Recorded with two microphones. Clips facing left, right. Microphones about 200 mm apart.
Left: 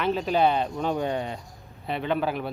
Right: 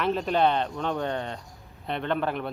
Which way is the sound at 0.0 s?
Centre (ahead or behind).